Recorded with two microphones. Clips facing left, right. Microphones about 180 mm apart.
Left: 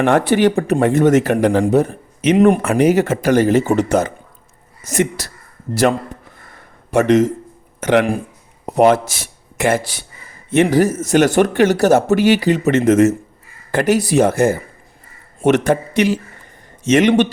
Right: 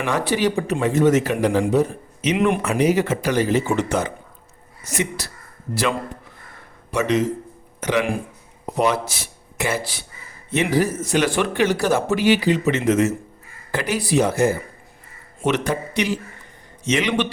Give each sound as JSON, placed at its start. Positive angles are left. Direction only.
{"t": 0.0, "sound": "speech", "side_deg": 55}
{"t": 6.9, "sound": "speech", "side_deg": 50}